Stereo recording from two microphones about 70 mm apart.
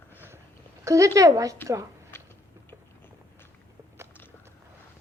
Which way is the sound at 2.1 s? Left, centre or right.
Left.